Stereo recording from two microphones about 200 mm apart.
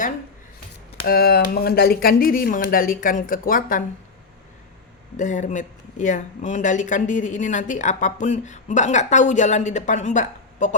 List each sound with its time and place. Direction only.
1.0 s speech: 50° left (ahead or behind)
5.1 s speech: 40° left (ahead or behind)